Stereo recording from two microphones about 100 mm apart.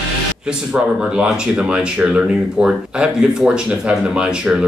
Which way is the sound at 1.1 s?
10° right (ahead or behind).